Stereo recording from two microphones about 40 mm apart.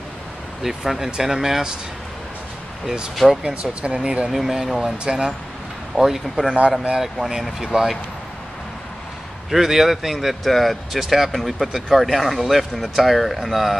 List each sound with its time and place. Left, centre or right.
0.6 s speech: centre
3.2 s speech: centre
3.6 s speech: right
4.3 s speech: centre
4.7 s speech: centre
5.9 s speech: centre
9.5 s speech: centre